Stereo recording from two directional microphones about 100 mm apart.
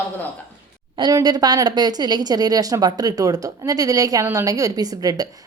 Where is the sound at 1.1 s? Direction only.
40° right (ahead or behind).